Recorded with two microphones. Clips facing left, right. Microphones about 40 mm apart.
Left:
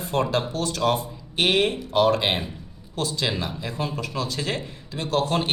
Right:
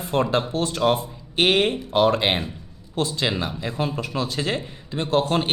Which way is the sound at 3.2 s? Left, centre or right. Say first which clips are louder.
Right 2 dB; centre.